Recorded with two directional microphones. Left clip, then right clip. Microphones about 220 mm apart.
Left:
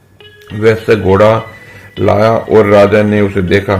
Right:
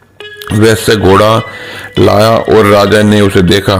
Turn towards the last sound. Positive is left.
turn(degrees=-50)  # may be behind; listen again after turning